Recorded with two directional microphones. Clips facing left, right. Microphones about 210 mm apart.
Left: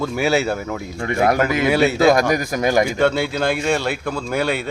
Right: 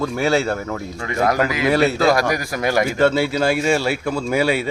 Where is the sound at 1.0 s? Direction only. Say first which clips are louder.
Left 2 dB; 30° left (ahead or behind).